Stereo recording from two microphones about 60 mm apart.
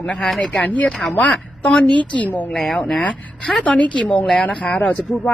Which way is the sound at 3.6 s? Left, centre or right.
Left.